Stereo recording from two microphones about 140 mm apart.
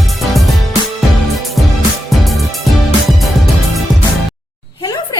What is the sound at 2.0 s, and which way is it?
Music, centre (ahead or behind).